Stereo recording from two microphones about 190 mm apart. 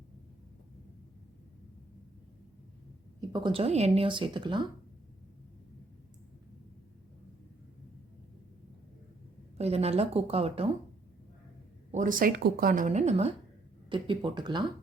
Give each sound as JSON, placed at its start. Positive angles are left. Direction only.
{"t": 3.2, "sound": "speech", "side_deg": -25}
{"t": 9.6, "sound": "a woman's voice", "side_deg": -35}
{"t": 11.9, "sound": "speech", "side_deg": -45}